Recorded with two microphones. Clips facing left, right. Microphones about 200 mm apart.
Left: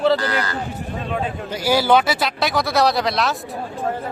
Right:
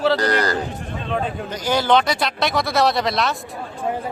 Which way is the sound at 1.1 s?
Centre (ahead or behind).